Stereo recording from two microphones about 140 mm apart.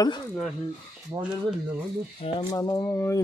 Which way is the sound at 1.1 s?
25° right (ahead or behind).